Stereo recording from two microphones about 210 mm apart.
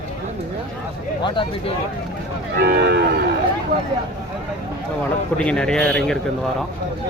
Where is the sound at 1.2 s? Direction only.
25° left (ahead or behind).